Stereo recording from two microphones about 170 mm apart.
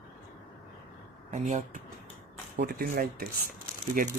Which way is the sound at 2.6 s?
60° right (ahead or behind).